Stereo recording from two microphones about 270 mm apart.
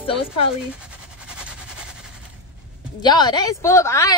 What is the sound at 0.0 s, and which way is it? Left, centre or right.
Speech, centre.